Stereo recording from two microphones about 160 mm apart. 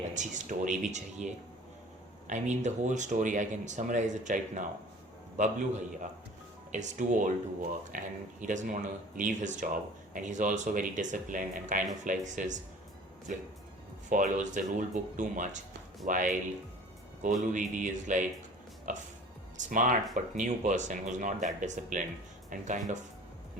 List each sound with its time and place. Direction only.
0.1 s speech: 50° right (ahead or behind)
14.1 s speech: 55° right (ahead or behind)